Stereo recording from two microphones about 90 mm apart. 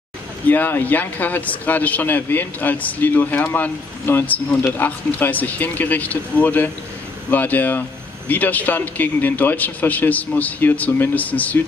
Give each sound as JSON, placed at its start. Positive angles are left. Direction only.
{"t": 0.5, "sound": "speech", "side_deg": 20}